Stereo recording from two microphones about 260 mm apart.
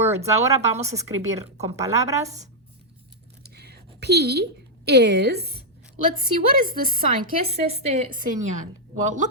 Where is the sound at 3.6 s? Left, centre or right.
Right.